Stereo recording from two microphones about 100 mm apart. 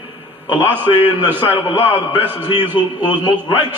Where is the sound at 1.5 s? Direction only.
60° left (ahead or behind).